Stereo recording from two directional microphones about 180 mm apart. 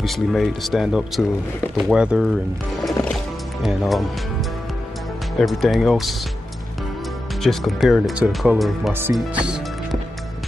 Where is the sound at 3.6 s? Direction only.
Centre (ahead or behind).